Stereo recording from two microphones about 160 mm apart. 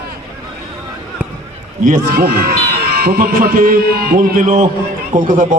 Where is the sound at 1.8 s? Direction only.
65° right (ahead or behind).